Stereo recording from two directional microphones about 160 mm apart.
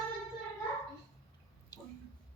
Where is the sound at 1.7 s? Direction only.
25° left (ahead or behind).